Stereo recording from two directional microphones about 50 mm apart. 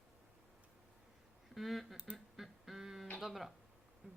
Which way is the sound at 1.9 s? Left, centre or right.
Right.